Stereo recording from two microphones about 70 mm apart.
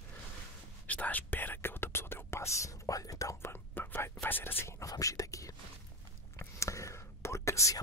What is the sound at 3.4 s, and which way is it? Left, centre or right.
Whispering, left.